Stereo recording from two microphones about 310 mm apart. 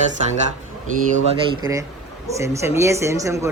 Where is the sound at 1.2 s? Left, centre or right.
Centre.